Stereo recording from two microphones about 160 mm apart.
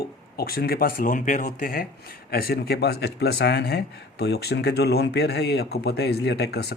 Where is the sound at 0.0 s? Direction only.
75° left (ahead or behind).